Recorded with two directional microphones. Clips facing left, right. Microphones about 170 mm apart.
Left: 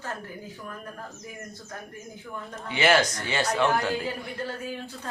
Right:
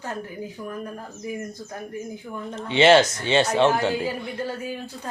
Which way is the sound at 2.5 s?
25° right (ahead or behind).